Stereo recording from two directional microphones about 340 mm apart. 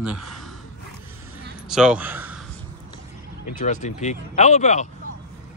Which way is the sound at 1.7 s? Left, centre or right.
Centre.